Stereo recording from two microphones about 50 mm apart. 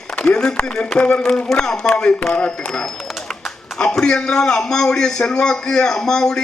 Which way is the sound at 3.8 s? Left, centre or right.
Centre.